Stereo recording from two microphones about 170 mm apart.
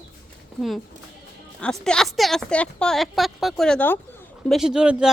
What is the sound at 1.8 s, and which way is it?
Speech, 5° left (ahead or behind).